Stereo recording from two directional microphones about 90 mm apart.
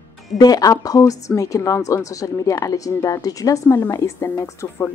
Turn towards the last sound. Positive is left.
turn(degrees=35)  # may be behind; listen again after turning